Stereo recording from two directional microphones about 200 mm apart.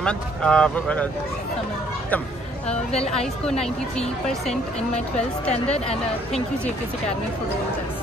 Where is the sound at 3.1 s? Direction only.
5° left (ahead or behind).